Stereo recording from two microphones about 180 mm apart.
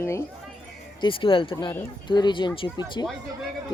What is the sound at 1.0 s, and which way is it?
Speech, 30° left (ahead or behind).